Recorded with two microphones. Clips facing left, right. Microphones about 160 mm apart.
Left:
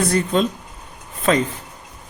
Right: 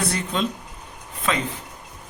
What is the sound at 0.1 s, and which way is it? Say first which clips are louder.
Speech: left 8 dB; 45° left (ahead or behind).